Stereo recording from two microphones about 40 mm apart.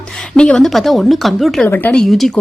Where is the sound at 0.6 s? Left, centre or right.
Centre.